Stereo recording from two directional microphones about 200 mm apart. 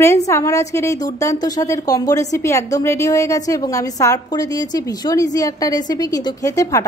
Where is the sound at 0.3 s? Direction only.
15° left (ahead or behind).